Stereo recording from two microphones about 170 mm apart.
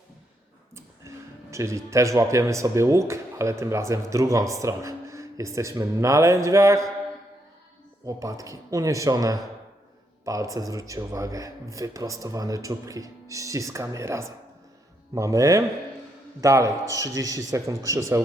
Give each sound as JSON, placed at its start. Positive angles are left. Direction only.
{"t": 0.8, "sound": "speech", "side_deg": -15}
{"t": 8.0, "sound": "speech", "side_deg": -20}